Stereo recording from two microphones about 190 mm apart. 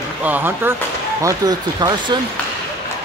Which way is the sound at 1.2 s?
20° right (ahead or behind).